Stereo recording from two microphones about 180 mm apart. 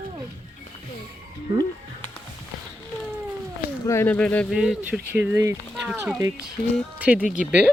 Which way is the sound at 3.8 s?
15° left (ahead or behind).